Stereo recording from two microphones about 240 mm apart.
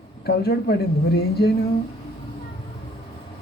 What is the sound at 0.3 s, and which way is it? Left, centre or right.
Speech, left.